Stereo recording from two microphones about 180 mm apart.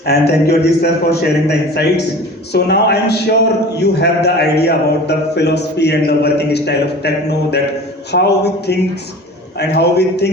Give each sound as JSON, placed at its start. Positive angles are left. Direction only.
{"t": 0.0, "sound": "a man's voice", "side_deg": 60}
{"t": 9.6, "sound": "a man's voice", "side_deg": 65}